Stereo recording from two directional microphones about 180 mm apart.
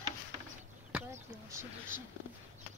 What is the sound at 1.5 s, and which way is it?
Speech, 15° right (ahead or behind).